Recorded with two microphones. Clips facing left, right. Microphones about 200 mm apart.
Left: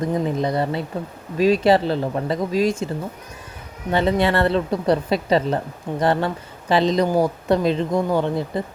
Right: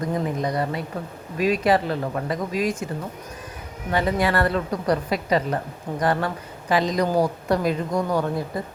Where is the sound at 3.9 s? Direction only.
25° left (ahead or behind).